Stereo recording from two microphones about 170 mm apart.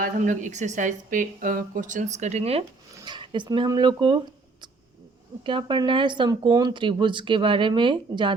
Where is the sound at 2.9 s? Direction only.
25° right (ahead or behind).